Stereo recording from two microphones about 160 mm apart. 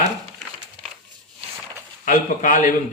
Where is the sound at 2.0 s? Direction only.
55° left (ahead or behind).